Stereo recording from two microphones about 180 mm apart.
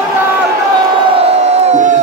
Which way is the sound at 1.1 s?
35° right (ahead or behind).